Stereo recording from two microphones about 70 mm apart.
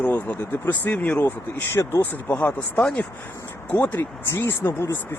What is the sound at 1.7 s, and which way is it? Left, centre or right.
Speech, left.